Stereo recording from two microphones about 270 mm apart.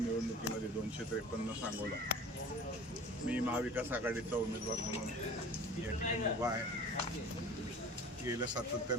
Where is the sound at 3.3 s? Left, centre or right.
Centre.